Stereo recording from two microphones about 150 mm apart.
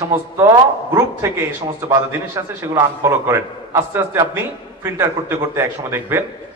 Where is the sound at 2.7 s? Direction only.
15° right (ahead or behind).